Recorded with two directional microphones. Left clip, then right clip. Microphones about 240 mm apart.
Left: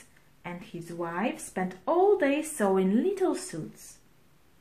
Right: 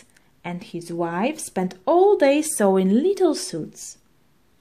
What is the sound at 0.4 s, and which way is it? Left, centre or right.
A woman's voice, right.